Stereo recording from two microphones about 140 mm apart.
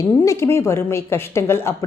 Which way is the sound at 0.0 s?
20° left (ahead or behind).